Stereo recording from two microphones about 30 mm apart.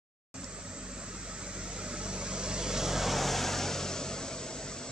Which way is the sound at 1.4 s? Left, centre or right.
Right.